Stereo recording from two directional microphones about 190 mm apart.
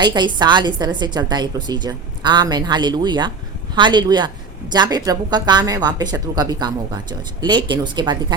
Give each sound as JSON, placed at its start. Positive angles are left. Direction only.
{"t": 0.0, "sound": "speech", "side_deg": -20}